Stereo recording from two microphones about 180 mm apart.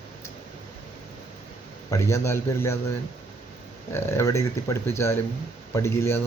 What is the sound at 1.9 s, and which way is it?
Speech, 15° left (ahead or behind).